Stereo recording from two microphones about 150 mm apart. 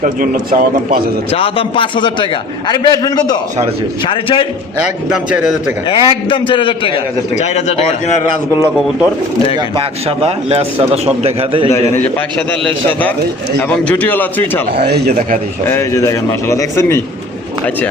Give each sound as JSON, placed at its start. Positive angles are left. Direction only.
{"t": 0.0, "sound": "a man's voice", "side_deg": -65}
{"t": 1.3, "sound": "a man's voice", "side_deg": 35}
{"t": 5.1, "sound": "speech", "side_deg": -5}
{"t": 5.9, "sound": "a man's voice", "side_deg": 35}
{"t": 7.3, "sound": "speech", "side_deg": 45}
{"t": 9.6, "sound": "a man's voice", "side_deg": -35}
{"t": 13.6, "sound": "a man's voice", "side_deg": 10}
{"t": 14.8, "sound": "speech", "side_deg": -90}
{"t": 15.6, "sound": "a man's voice", "side_deg": 20}